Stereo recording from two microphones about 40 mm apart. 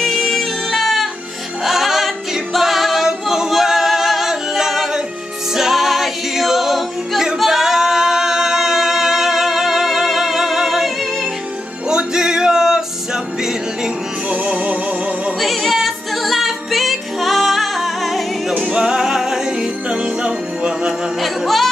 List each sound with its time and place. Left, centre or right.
0.7 s music: centre
7.3 s singing: centre
11.9 s music: centre
14.3 s music: right
15.4 s music: centre
18.6 s music: right
21.2 s music: centre